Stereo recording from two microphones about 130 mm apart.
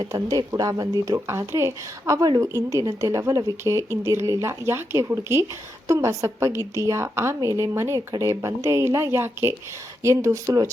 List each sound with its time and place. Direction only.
0.0 s speech: 25° right (ahead or behind)